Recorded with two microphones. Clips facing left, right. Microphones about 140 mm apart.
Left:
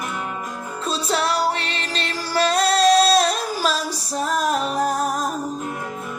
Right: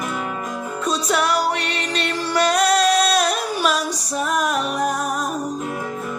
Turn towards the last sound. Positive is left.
turn(degrees=35)  # may be behind; listen again after turning